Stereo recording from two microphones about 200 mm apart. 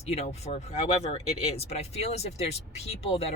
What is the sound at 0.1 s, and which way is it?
Speech, 30° left (ahead or behind).